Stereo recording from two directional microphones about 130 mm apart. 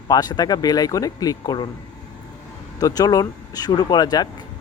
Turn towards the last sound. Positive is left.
turn(degrees=30)  # may be behind; listen again after turning